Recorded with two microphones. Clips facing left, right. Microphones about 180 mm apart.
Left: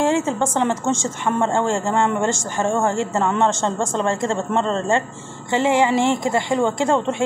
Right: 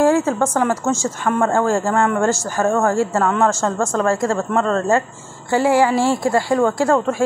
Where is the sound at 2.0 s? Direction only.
5° right (ahead or behind).